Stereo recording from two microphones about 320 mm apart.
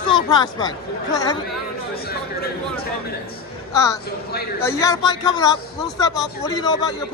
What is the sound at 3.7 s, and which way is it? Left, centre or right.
Speech, centre.